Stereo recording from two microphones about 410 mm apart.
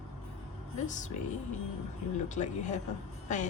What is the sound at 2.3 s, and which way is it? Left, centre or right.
Speech, centre.